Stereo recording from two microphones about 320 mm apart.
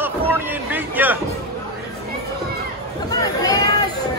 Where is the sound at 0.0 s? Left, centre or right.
Centre.